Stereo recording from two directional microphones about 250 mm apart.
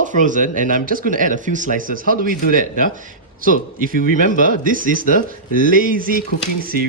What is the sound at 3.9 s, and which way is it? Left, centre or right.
Speech, left.